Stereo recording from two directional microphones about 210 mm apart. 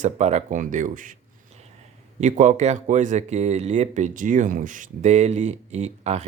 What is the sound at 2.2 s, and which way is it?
Speech, 35° right (ahead or behind).